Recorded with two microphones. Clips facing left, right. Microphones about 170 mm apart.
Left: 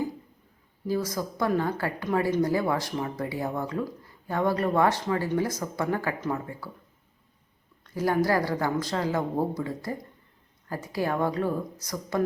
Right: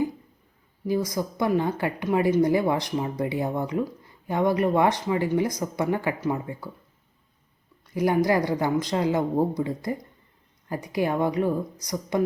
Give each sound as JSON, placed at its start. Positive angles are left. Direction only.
{"t": 0.9, "sound": "speech", "side_deg": -15}
{"t": 7.9, "sound": "speech", "side_deg": -15}